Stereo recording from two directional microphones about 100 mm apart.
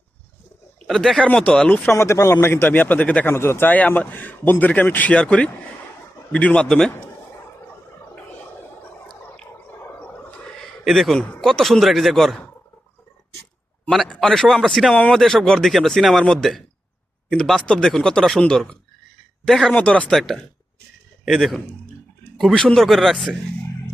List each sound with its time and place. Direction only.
0.9 s speech: centre (ahead or behind)
1.2 s speech: 10° left (ahead or behind)
1.9 s a man's voice: 30° left (ahead or behind)
3.3 s speech: 25° left (ahead or behind); by 6.9 s 5° left (ahead or behind)
9.8 s gargling: 20° left (ahead or behind)
10.8 s speech: centre (ahead or behind)
14.1 s speech: 5° left (ahead or behind)